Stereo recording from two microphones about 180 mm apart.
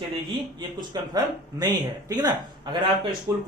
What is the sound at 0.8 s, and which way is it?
Speech, 20° right (ahead or behind).